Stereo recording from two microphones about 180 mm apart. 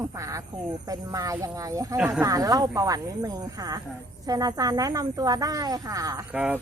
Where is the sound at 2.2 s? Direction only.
20° right (ahead or behind).